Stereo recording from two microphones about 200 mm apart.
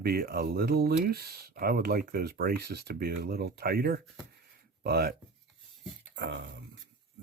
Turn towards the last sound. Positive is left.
turn(degrees=-60)  # may be behind; listen again after turning